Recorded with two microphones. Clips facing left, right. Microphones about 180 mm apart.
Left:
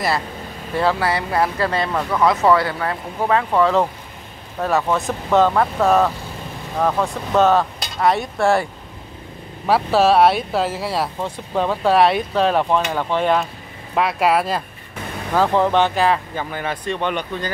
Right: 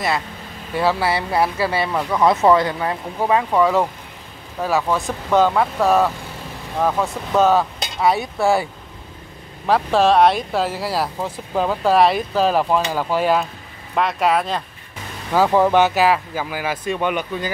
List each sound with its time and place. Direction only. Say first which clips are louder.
0.7 s speech: even; 10° right (ahead or behind)
2.2 s speech: right 1 dB; 20° right (ahead or behind)
4.6 s speech: left 1 dB; centre (ahead or behind)
9.7 s speech: even; 5° left (ahead or behind)
15.3 s speech: right 2 dB; 10° right (ahead or behind)